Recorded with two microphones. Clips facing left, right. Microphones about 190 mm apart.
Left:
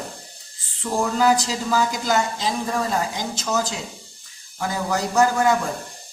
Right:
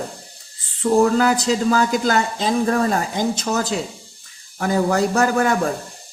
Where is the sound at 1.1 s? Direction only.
60° right (ahead or behind).